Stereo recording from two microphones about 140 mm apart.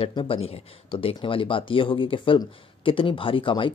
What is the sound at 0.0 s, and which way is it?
Speech, 40° left (ahead or behind).